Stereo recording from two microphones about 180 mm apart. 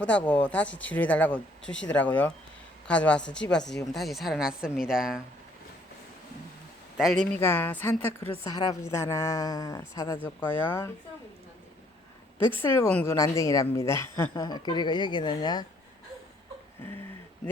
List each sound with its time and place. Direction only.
0.0 s a woman's voice: 5° left (ahead or behind)
6.9 s speech: centre (ahead or behind)
7.3 s a woman's voice: 10° left (ahead or behind)
12.6 s a woman's voice: 10° left (ahead or behind)